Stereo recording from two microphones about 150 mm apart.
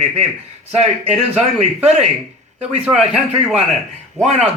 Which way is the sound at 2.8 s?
5° right (ahead or behind).